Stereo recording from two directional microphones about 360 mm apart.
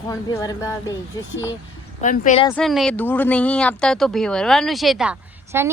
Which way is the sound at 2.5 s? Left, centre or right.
Centre.